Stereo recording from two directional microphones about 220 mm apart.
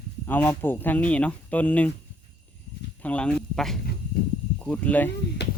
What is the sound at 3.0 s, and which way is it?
Speech, 5° left (ahead or behind).